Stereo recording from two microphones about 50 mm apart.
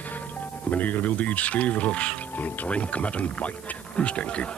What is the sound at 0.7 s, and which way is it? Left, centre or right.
Speech, left.